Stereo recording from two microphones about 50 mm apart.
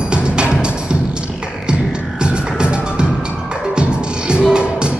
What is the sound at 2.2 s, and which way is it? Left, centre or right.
Music, centre.